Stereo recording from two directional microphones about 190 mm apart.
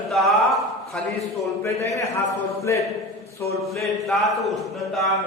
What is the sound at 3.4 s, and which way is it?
Speech, 10° left (ahead or behind).